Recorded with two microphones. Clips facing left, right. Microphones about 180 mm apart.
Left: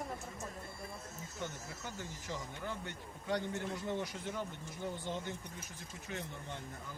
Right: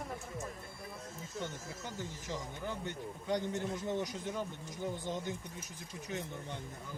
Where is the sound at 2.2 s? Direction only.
20° right (ahead or behind).